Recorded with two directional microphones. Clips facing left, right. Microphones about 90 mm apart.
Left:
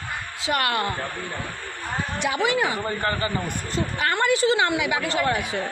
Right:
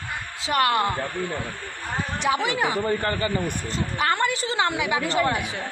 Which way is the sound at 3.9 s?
30° right (ahead or behind).